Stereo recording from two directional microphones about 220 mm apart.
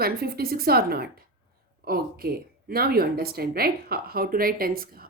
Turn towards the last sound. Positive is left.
turn(degrees=-40)  # may be behind; listen again after turning